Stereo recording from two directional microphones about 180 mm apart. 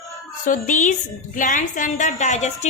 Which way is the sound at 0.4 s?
45° left (ahead or behind).